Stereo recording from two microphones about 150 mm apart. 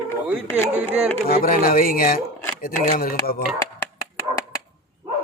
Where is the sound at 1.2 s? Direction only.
75° left (ahead or behind).